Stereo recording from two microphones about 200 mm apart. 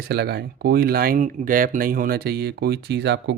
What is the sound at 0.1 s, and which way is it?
Speech, 55° right (ahead or behind).